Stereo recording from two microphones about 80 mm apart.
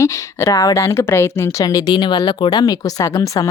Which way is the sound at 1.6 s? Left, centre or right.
Left.